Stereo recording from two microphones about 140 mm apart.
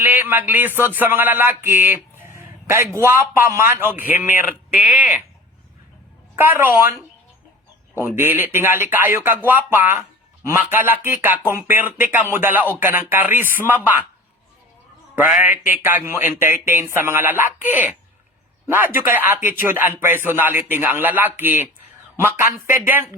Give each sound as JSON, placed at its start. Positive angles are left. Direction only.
{"t": 0.0, "sound": "a man's voice", "side_deg": -15}
{"t": 6.3, "sound": "a man's voice", "side_deg": -15}
{"t": 7.9, "sound": "a man's voice", "side_deg": -15}
{"t": 15.1, "sound": "a man's voice", "side_deg": -10}